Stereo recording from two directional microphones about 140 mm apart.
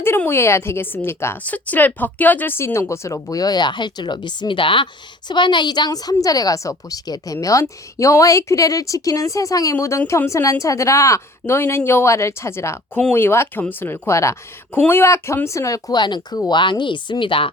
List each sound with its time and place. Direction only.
0.0 s a woman's voice: 15° left (ahead or behind); by 17.5 s 35° left (ahead or behind)